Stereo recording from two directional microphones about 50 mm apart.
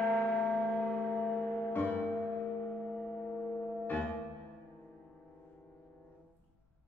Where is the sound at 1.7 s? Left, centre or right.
Left.